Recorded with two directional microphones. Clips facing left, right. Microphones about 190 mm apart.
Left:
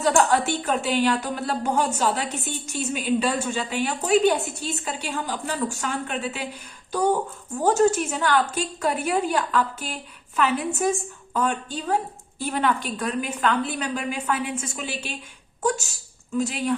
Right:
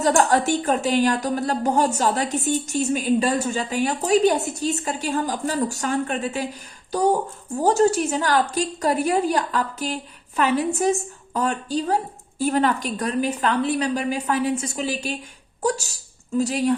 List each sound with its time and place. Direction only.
0.0 s speech: 40° right (ahead or behind)
7.6 s speech: 35° right (ahead or behind)